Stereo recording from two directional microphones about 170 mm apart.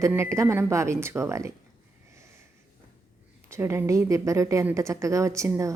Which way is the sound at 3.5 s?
15° right (ahead or behind).